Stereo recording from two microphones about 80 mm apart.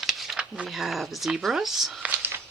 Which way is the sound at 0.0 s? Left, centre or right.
Centre.